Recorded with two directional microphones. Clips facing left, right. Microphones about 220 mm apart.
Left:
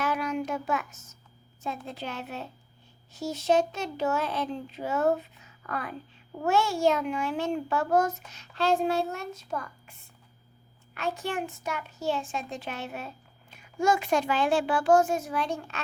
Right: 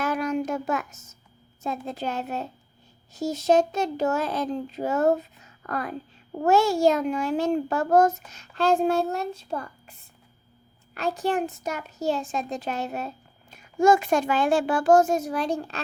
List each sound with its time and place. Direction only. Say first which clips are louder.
0.0 s a sound: right 4 dB; 45° right (ahead or behind)
1.6 s a child's voice: right 5 dB; 40° right (ahead or behind)
10.9 s a child's voice: right 6 dB; 35° right (ahead or behind)